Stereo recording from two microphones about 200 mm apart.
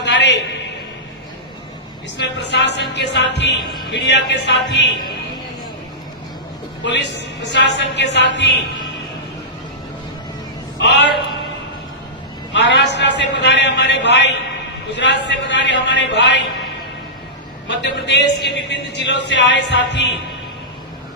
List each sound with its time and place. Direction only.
0.0 s a sound: 60° left (ahead or behind)
2.1 s speech: 60° left (ahead or behind)
6.8 s speech: 60° left (ahead or behind)
10.8 s a man's voice: 60° left (ahead or behind)
12.5 s speech: 60° left (ahead or behind)
17.7 s speech: 60° left (ahead or behind)